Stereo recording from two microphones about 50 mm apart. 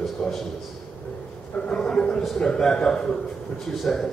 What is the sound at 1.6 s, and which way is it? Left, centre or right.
A man's voice, centre.